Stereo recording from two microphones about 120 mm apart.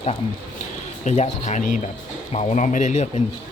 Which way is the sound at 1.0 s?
70° left (ahead or behind).